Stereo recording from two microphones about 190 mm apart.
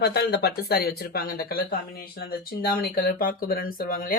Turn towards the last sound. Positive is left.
turn(degrees=50)  # may be behind; listen again after turning